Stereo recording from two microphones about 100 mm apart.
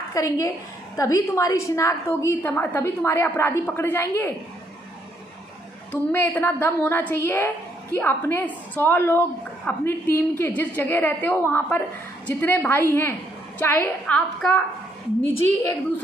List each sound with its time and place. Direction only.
0.1 s a woman's voice: 35° left (ahead or behind)
5.9 s a woman's voice: 20° left (ahead or behind)